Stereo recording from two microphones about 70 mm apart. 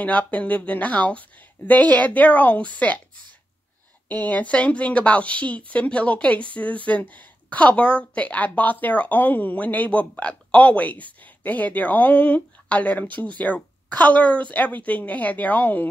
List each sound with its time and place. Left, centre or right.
0.0 s speech: centre
4.1 s speech: left